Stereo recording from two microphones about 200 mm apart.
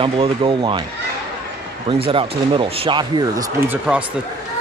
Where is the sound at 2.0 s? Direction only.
25° right (ahead or behind).